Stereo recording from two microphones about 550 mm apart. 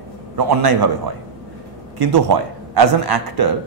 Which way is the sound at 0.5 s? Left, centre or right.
Right.